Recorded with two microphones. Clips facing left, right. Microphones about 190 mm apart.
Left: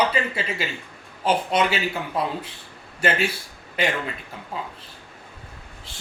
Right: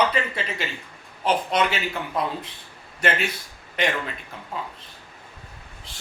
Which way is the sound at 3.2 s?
30° left (ahead or behind).